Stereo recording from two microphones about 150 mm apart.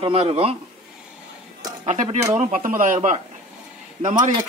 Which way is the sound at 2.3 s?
65° right (ahead or behind).